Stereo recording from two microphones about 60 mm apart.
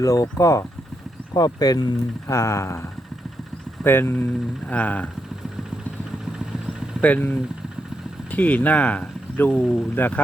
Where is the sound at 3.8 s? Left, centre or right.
Left.